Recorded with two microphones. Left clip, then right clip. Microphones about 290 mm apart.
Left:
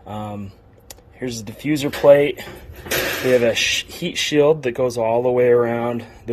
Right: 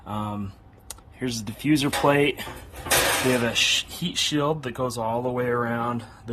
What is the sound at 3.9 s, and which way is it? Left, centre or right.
Speech, centre.